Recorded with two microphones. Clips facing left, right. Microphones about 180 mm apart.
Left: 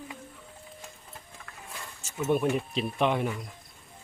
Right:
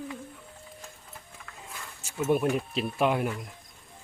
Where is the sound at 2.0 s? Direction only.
5° right (ahead or behind).